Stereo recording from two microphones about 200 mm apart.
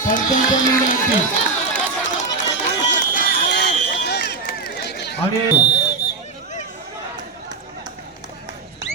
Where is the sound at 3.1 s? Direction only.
45° left (ahead or behind).